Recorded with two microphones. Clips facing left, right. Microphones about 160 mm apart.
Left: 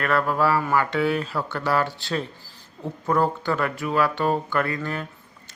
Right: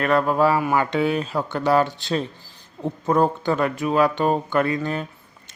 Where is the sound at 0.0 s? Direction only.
20° right (ahead or behind).